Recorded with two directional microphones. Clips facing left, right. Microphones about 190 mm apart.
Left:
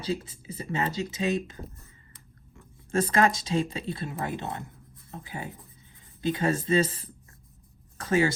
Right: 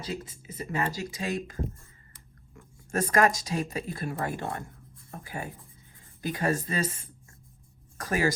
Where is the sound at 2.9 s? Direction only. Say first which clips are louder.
Left 1 dB; 25° left (ahead or behind).